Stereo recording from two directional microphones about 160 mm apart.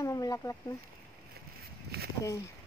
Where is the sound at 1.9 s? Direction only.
75° right (ahead or behind).